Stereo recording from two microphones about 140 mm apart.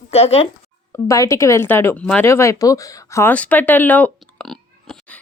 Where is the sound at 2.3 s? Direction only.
20° left (ahead or behind).